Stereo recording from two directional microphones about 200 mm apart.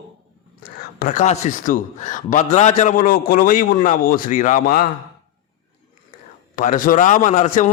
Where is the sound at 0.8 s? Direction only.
45° left (ahead or behind).